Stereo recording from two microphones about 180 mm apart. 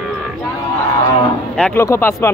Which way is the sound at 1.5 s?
10° left (ahead or behind).